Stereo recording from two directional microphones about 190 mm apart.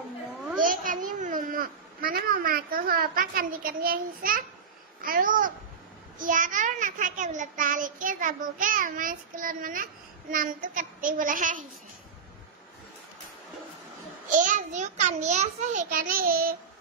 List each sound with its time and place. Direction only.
0.6 s a sound: 45° right (ahead or behind)
5.0 s a child's voice: 45° right (ahead or behind)
14.3 s a child's voice: 45° right (ahead or behind)